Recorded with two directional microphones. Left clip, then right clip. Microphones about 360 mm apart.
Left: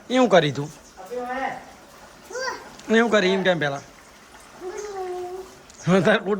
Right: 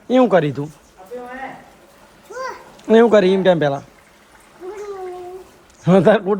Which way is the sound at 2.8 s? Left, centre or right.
Centre.